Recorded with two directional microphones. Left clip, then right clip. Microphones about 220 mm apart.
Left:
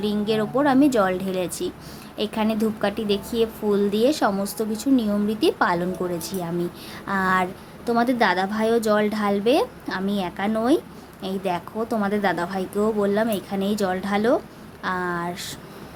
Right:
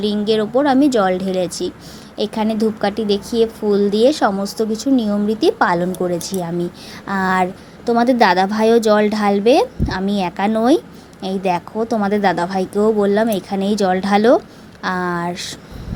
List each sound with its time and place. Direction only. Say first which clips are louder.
0.0 s a woman's voice: right 6 dB; 15° right (ahead or behind)